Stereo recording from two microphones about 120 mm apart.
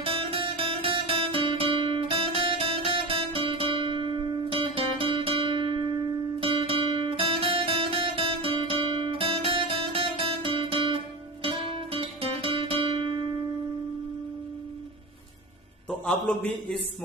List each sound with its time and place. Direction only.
0.0 s guitar: 50° right (ahead or behind)
6.4 s music: 45° right (ahead or behind)
15.9 s a man's voice: 5° left (ahead or behind)